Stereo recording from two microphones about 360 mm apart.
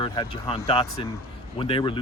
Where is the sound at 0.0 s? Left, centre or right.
Centre.